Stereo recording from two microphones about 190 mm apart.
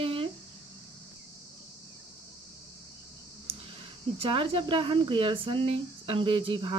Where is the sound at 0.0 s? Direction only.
30° right (ahead or behind).